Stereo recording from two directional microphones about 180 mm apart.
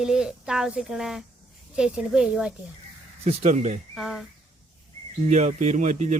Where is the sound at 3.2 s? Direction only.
40° right (ahead or behind).